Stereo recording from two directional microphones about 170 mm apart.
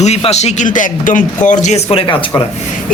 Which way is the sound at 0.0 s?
40° left (ahead or behind).